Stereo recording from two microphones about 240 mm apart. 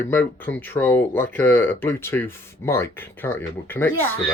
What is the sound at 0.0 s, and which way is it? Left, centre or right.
Speech, centre.